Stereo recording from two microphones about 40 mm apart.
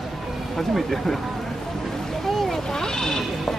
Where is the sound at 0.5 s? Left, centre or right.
Centre.